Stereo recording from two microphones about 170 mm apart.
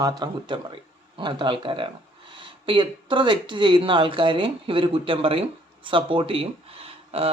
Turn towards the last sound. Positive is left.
turn(degrees=-35)  # may be behind; listen again after turning